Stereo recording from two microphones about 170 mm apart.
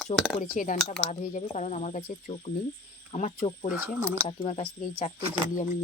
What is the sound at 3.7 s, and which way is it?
Speech, 10° right (ahead or behind).